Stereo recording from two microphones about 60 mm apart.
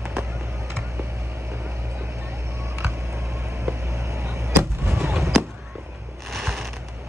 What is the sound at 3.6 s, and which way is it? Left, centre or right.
Vehicle, right.